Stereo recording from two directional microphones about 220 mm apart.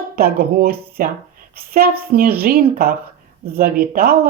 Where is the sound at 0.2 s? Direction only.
45° right (ahead or behind).